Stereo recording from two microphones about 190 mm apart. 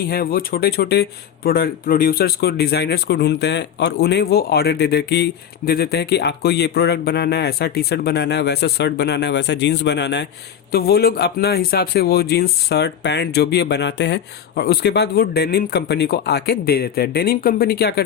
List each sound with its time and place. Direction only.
0.1 s speech: 50° left (ahead or behind)
10.7 s speech: 55° left (ahead or behind)